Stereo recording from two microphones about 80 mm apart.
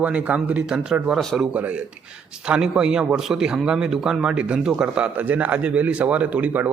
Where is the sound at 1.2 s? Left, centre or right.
Centre.